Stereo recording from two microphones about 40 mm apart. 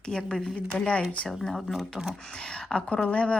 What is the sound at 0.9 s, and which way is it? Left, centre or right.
Speech, left.